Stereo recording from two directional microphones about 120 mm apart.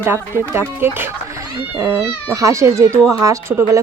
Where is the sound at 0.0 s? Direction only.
20° right (ahead or behind).